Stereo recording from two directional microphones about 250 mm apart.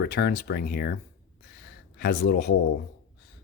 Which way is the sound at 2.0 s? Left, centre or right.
Left.